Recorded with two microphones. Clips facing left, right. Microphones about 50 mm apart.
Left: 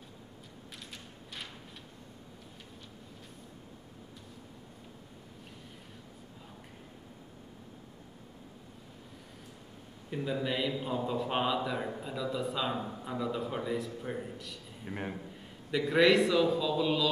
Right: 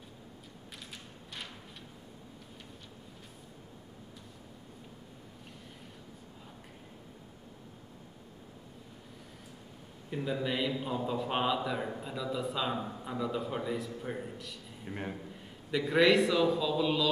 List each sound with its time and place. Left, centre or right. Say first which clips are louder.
10.0 s a man's voice: even; centre